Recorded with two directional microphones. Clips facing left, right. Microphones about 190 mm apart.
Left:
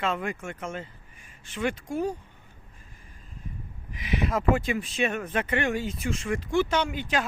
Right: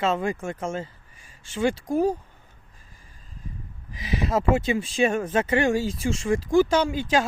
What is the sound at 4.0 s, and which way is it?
Speech, 25° right (ahead or behind).